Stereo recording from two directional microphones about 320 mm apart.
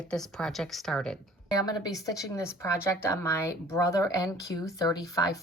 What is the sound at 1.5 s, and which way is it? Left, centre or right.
Speech, centre.